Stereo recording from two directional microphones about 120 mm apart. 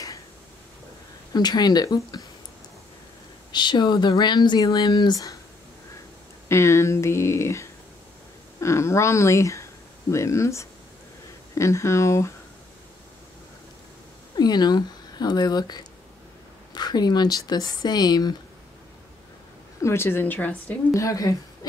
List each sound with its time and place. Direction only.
1.3 s speech: 35° left (ahead or behind)
3.5 s speech: 40° left (ahead or behind)
6.5 s speech: 25° left (ahead or behind)
14.3 s speech: 35° left (ahead or behind)
19.8 s a woman's voice: 20° left (ahead or behind)
20.9 s speech: 25° left (ahead or behind)